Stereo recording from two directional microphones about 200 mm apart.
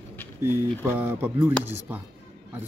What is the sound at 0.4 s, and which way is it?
Speech, 10° right (ahead or behind).